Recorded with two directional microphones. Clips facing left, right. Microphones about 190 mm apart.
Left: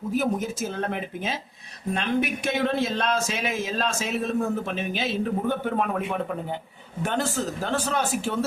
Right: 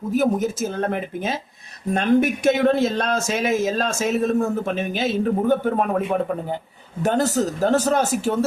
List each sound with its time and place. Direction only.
0.1 s speech: 45° right (ahead or behind)